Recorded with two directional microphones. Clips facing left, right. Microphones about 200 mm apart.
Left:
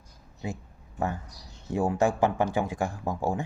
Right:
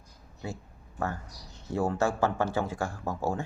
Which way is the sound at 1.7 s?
15° left (ahead or behind).